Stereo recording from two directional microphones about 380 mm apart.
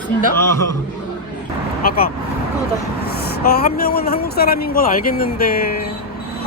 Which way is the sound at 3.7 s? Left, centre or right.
Left.